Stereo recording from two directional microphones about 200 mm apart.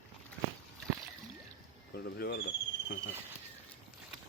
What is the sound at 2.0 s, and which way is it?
Speech, 55° left (ahead or behind).